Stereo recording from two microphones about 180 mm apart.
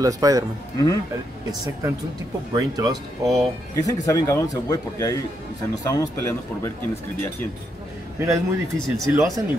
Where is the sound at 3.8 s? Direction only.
20° left (ahead or behind).